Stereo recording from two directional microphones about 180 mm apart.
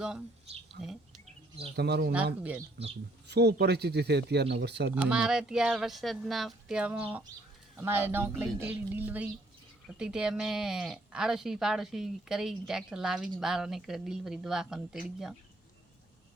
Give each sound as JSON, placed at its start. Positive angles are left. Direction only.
{"t": 0.8, "sound": "speech", "side_deg": -65}
{"t": 2.1, "sound": "a woman's voice", "side_deg": -5}
{"t": 3.2, "sound": "speech", "side_deg": -65}
{"t": 4.9, "sound": "a woman's voice", "side_deg": -5}